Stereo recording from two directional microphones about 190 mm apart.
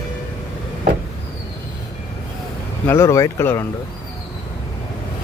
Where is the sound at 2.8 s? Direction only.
15° left (ahead or behind).